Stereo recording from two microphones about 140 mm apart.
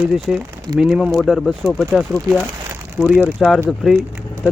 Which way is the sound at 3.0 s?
5° right (ahead or behind).